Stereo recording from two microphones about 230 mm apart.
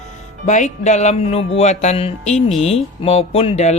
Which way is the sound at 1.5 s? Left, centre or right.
Left.